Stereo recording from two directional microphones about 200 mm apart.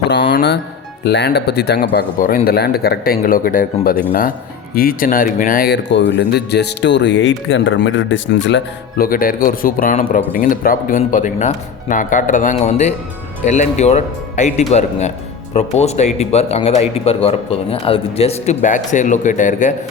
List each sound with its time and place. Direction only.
0.1 s music: 60° left (ahead or behind)
1.0 s speech: 60° left (ahead or behind)
9.0 s speech: 45° left (ahead or behind)